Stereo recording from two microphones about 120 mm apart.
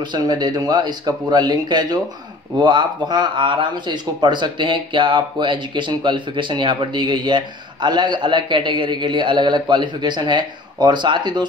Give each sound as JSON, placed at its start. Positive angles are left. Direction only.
{"t": 0.0, "sound": "speech", "side_deg": -40}